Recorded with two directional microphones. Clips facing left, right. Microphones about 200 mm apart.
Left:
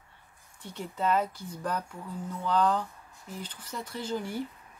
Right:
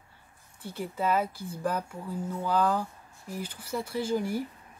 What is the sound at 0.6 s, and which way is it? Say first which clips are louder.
Speech: right 2 dB; 5° right (ahead or behind).